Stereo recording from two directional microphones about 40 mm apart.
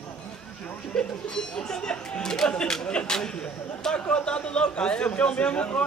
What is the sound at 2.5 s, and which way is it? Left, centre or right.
Speech, left.